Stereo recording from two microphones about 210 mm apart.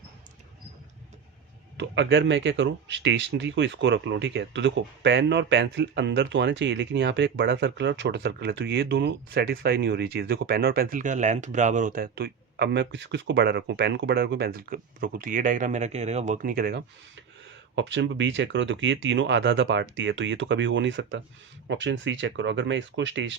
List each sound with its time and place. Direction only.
1.8 s speech: 55° right (ahead or behind)
17.7 s speech: 60° right (ahead or behind)